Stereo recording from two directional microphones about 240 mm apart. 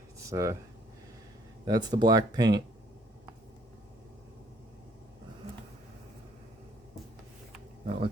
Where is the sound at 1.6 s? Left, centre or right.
Centre.